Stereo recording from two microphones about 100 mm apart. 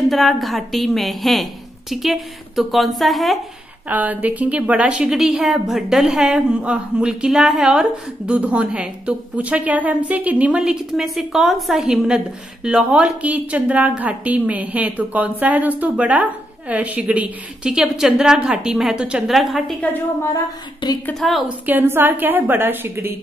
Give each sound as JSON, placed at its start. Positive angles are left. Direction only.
{"t": 0.1, "sound": "a woman's voice", "side_deg": 0}
{"t": 3.9, "sound": "a woman's voice", "side_deg": -15}
{"t": 19.8, "sound": "a woman's voice", "side_deg": 20}
{"t": 21.1, "sound": "a woman's voice", "side_deg": 0}
{"t": 21.5, "sound": "a woman's voice", "side_deg": -20}